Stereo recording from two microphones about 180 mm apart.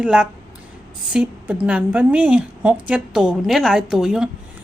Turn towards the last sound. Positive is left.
turn(degrees=-5)  # may be behind; listen again after turning